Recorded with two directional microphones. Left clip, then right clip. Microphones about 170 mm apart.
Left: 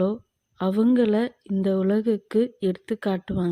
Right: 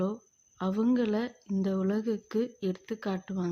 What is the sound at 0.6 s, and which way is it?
A woman's voice, 35° left (ahead or behind).